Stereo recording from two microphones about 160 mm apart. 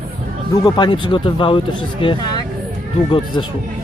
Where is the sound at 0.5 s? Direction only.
25° left (ahead or behind).